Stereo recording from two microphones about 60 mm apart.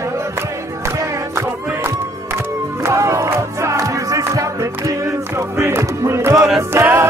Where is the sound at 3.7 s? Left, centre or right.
Right.